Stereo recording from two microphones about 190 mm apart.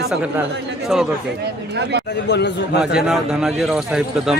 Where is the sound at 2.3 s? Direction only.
65° left (ahead or behind).